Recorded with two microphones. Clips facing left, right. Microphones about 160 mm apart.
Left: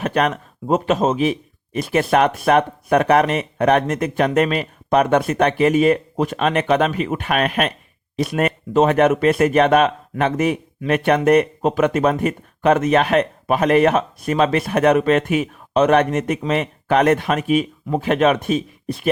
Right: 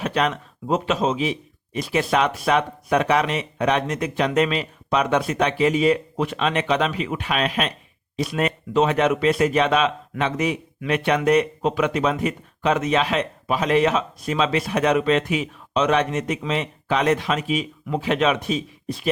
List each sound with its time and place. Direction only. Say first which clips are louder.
0.0 s speech: left 3 dB; 50° left (ahead or behind)